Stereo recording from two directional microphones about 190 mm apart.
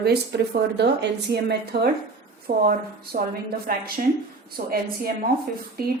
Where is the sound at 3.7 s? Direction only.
50° right (ahead or behind).